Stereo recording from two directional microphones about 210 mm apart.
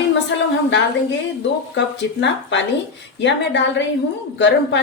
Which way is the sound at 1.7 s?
55° left (ahead or behind).